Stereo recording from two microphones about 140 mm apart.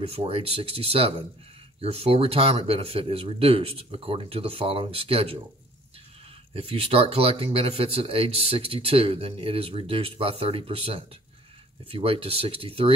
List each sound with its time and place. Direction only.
0.0 s speech: 45° right (ahead or behind)
6.5 s speech: 40° right (ahead or behind)